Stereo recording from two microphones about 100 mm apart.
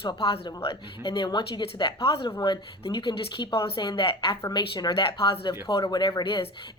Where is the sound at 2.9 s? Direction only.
55° left (ahead or behind).